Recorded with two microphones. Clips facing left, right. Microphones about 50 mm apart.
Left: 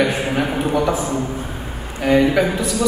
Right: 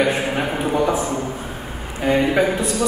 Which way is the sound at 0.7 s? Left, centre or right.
Centre.